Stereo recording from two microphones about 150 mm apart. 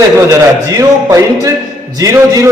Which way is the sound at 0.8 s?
20° right (ahead or behind).